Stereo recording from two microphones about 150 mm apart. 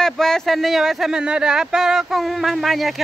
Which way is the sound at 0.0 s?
5° left (ahead or behind).